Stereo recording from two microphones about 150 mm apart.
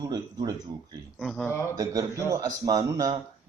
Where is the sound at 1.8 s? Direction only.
20° right (ahead or behind).